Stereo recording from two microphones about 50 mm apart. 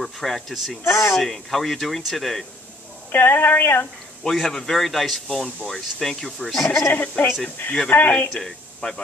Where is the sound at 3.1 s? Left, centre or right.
Left.